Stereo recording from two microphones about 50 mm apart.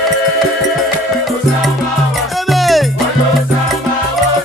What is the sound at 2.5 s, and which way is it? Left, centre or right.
Music, centre.